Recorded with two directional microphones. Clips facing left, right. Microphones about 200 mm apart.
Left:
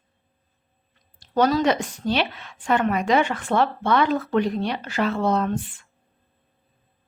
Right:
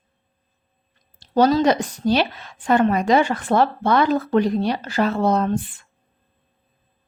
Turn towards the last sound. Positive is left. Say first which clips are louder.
# right 3 dB
turn(degrees=-40)  # may be behind; listen again after turning